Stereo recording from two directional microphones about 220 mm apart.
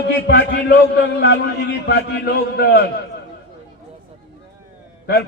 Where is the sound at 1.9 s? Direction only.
45° left (ahead or behind).